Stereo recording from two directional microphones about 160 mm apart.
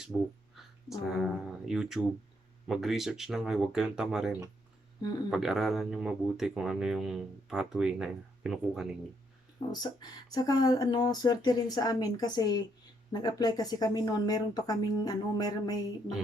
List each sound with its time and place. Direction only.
0.5 s speech: centre (ahead or behind)
9.7 s speech: 25° left (ahead or behind)